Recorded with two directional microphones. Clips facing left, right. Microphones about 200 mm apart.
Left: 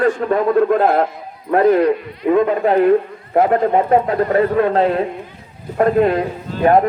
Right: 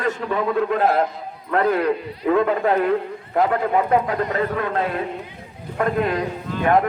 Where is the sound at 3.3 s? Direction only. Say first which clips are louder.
Left 5 dB; 35° left (ahead or behind).